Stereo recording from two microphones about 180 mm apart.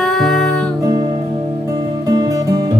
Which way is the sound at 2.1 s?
20° right (ahead or behind).